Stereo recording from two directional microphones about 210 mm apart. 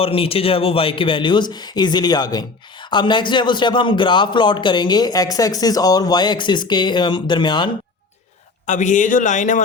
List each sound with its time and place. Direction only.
0.0 s speech: 25° left (ahead or behind)
8.6 s a man's voice: 35° left (ahead or behind)